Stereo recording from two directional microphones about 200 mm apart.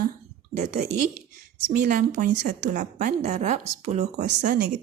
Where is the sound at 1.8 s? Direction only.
40° right (ahead or behind).